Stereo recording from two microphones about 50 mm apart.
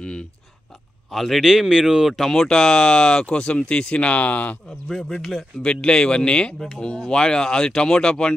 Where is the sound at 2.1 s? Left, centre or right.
Centre.